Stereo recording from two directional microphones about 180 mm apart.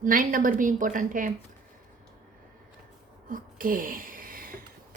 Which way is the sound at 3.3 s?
50° right (ahead or behind).